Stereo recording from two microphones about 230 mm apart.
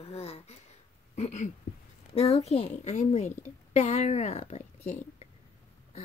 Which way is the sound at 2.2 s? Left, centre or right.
Left.